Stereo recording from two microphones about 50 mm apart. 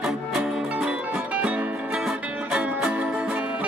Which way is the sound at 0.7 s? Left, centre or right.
Right.